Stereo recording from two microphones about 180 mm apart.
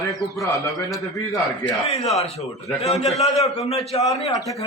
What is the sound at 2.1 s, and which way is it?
A man's voice, 35° left (ahead or behind).